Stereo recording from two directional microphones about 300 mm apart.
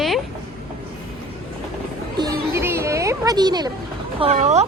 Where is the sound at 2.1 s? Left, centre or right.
Centre.